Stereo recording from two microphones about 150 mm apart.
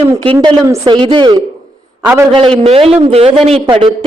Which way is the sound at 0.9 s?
30° right (ahead or behind).